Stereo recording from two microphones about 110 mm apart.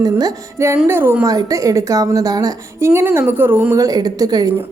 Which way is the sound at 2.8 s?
20° right (ahead or behind).